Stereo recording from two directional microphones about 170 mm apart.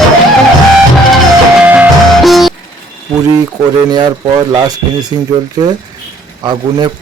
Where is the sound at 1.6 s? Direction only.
10° right (ahead or behind).